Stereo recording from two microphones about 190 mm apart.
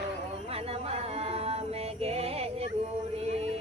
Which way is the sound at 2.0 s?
30° right (ahead or behind).